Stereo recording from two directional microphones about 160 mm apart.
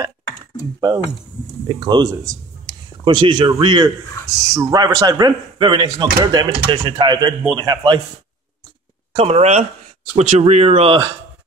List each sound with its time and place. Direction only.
0.7 s a man's voice: 25° right (ahead or behind)
9.1 s speech: 40° right (ahead or behind)